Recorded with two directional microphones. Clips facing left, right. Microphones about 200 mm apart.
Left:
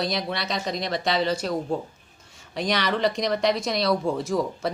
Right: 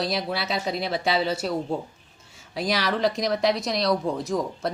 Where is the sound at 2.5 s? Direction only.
5° right (ahead or behind).